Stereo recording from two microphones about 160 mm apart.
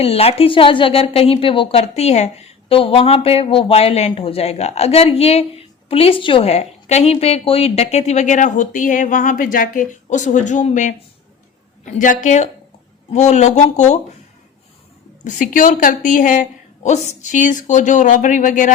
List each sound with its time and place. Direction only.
0.0 s a woman's voice: 40° left (ahead or behind)
12.2 s a woman's voice: 50° left (ahead or behind)
15.2 s a woman's voice: 55° left (ahead or behind)